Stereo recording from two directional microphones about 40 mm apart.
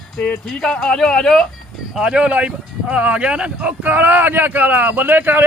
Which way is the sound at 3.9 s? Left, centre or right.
Right.